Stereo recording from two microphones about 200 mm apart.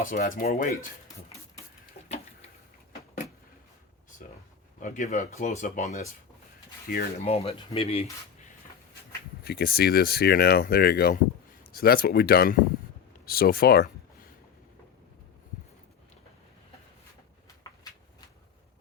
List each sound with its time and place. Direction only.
0.0 s speech: 45° left (ahead or behind)
2.0 s a sound: 30° left (ahead or behind)
4.8 s speech: 35° left (ahead or behind)
7.2 s speech: 30° left (ahead or behind)
9.4 s speech: 50° left (ahead or behind)